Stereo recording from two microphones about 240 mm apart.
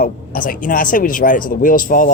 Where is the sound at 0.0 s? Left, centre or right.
Left.